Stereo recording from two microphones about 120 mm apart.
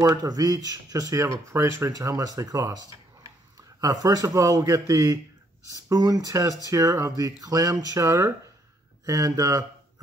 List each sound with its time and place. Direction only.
0.0 s speech: 30° right (ahead or behind)
3.8 s speech: 30° right (ahead or behind)